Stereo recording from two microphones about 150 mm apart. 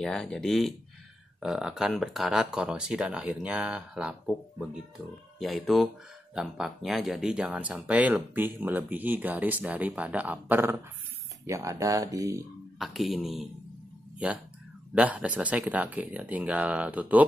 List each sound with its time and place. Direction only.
0.0 s speech: 5° left (ahead or behind); by 12.4 s 20° right (ahead or behind)
12.7 s speech: centre (ahead or behind)